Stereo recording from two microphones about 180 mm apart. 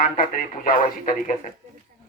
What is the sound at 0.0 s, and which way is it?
Speech, 50° left (ahead or behind).